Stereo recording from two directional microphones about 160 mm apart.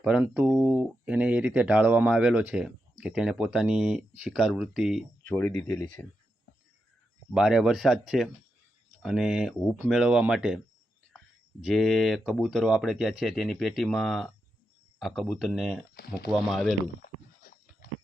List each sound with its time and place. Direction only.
0.0 s speech: 5° right (ahead or behind)
5.2 s speech: 15° left (ahead or behind)
7.3 s speech: 5° right (ahead or behind)
11.6 s speech: centre (ahead or behind)
16.0 s speech: 75° left (ahead or behind)
16.3 s speech: centre (ahead or behind)